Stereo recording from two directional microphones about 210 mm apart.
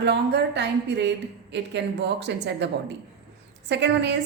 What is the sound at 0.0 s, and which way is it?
A woman's voice, 55° right (ahead or behind).